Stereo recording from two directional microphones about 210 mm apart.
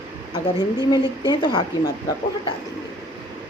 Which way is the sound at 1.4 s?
20° left (ahead or behind).